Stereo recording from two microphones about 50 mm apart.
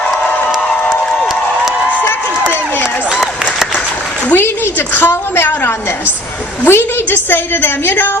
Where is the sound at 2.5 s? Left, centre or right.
Left.